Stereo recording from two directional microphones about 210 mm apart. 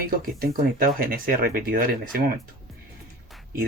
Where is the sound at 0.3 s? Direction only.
45° right (ahead or behind).